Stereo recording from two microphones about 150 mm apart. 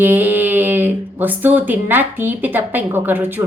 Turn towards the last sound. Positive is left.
turn(degrees=-15)  # may be behind; listen again after turning